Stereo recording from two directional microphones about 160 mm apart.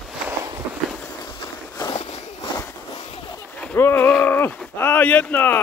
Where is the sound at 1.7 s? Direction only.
35° left (ahead or behind).